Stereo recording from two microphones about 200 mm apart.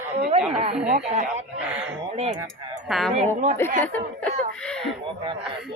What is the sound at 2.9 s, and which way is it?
A man's voice, centre (ahead or behind).